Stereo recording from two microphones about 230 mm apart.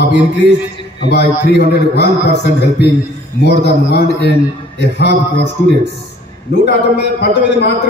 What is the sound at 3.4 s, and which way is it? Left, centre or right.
A man's voice, left.